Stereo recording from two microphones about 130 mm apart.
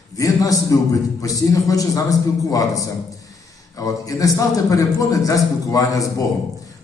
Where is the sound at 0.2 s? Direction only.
25° left (ahead or behind).